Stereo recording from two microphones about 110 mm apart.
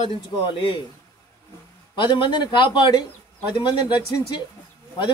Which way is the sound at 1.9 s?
45° left (ahead or behind).